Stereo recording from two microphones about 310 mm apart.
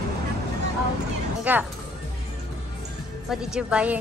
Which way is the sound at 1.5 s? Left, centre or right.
Centre.